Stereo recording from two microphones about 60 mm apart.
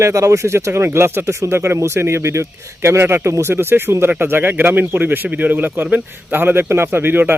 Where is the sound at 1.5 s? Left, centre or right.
Right.